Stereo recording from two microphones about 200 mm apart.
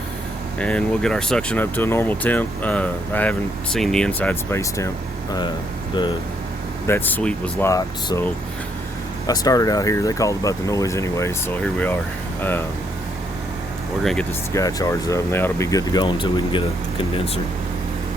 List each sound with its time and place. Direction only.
0.6 s speech: 5° left (ahead or behind)
6.8 s speech: 10° left (ahead or behind)
7.7 s speech: 15° left (ahead or behind)
9.2 s speech: 20° left (ahead or behind)
14.0 s speech: centre (ahead or behind)
14.5 s speech: 15° left (ahead or behind)